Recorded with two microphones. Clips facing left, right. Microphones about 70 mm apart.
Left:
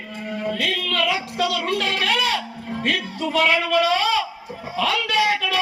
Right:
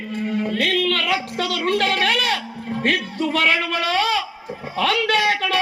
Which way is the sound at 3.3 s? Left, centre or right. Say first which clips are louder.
Left 3 dB; right.